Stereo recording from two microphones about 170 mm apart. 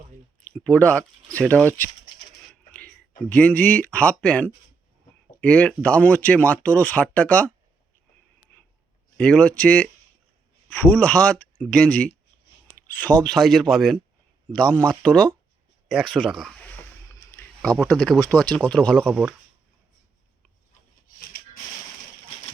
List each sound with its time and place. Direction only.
0.5 s speech: 10° left (ahead or behind)
3.2 s speech: 10° left (ahead or behind)
9.1 s speech: 5° left (ahead or behind)
16.6 s boat: 15° left (ahead or behind)
17.8 s speech: 5° left (ahead or behind)
19.0 s speech: 10° right (ahead or behind)
21.2 s a sound: 60° left (ahead or behind)